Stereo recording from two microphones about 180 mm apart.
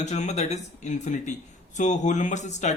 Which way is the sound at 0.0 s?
40° left (ahead or behind).